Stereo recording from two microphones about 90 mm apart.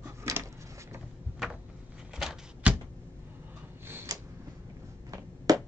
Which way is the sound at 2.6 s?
15° right (ahead or behind).